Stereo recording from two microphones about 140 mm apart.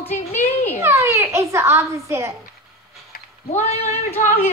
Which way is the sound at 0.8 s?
20° right (ahead or behind).